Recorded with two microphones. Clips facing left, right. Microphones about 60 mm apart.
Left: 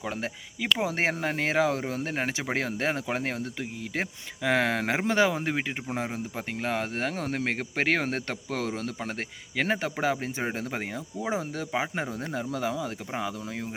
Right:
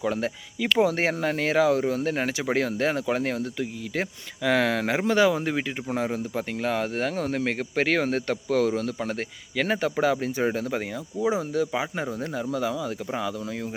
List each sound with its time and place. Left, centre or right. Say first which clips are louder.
0.0 s speech: right 6 dB; centre